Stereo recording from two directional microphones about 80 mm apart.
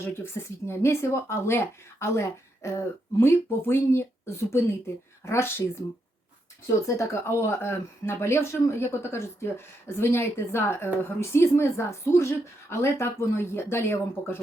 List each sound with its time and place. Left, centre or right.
0.0 s speech: left
6.8 s speech: left